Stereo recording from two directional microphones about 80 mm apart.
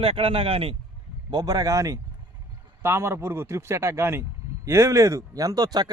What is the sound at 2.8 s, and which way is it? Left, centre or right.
Speech, right.